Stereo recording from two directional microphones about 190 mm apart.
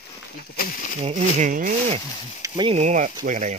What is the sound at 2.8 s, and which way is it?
Speech, 40° right (ahead or behind).